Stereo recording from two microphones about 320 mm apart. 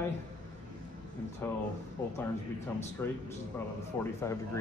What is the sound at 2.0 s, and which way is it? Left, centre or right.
Speech, centre.